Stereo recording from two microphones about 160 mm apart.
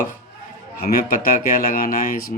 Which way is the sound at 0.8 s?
70° left (ahead or behind).